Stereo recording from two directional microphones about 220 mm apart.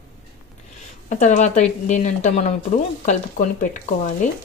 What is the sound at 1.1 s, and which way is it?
A woman's voice, 35° left (ahead or behind).